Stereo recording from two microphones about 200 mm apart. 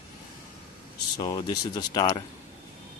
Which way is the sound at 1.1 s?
20° left (ahead or behind).